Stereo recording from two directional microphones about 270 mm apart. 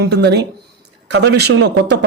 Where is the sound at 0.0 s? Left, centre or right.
Right.